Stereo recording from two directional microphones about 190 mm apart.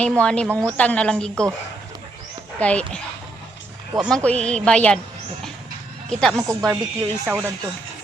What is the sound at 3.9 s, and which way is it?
Speech, 20° right (ahead or behind).